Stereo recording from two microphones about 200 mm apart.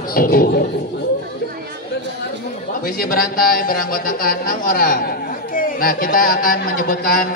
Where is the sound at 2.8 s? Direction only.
45° left (ahead or behind).